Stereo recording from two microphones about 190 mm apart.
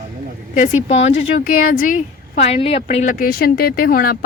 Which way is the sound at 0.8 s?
35° left (ahead or behind).